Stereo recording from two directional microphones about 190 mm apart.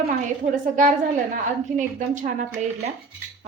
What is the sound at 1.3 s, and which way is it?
A woman's voice, 40° right (ahead or behind).